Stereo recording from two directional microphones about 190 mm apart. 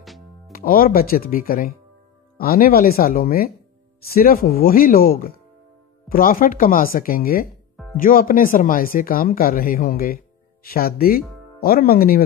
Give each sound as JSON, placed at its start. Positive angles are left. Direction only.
{"t": 0.5, "sound": "speech", "side_deg": 50}
{"t": 7.7, "sound": "music", "side_deg": 10}
{"t": 8.0, "sound": "speech", "side_deg": 45}